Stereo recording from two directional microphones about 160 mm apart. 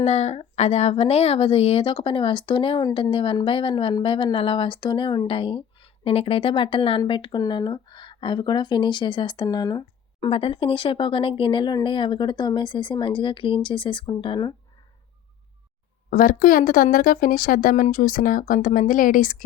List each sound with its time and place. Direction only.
0.0 s a woman's voice: 45° left (ahead or behind); by 10.2 s 25° left (ahead or behind)
10.2 s a woman's voice: 35° left (ahead or behind)
16.0 s speech: 60° left (ahead or behind)